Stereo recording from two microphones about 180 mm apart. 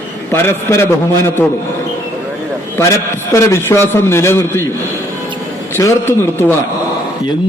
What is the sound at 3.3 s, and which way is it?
A man's voice, 15° left (ahead or behind).